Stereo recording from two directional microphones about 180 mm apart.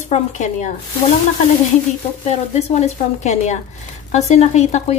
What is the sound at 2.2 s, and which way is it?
A woman's voice, 40° left (ahead or behind).